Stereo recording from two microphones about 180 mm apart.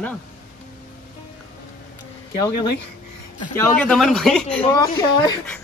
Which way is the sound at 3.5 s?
10° left (ahead or behind).